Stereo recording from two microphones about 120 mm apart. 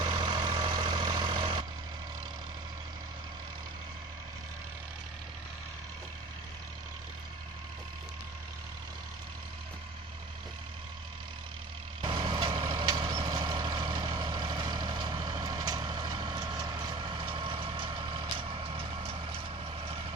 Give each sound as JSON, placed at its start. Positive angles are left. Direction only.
{"t": 0.0, "sound": "vehicle", "side_deg": -40}
{"t": 12.0, "sound": "vehicle", "side_deg": -40}